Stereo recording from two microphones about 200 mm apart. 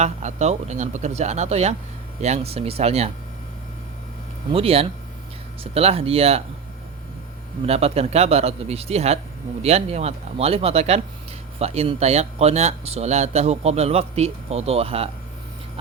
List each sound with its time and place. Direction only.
0.0 s speech: 35° right (ahead or behind)
4.5 s speech: 30° right (ahead or behind)
7.7 s speech: 30° right (ahead or behind)